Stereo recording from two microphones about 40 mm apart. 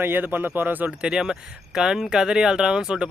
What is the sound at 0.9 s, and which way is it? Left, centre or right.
Speech, centre.